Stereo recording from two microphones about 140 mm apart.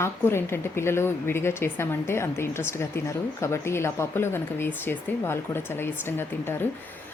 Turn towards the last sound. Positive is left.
turn(degrees=15)  # may be behind; listen again after turning